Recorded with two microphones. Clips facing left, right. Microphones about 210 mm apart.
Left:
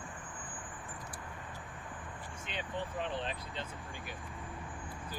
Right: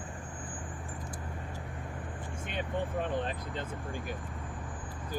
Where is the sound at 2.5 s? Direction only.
50° right (ahead or behind).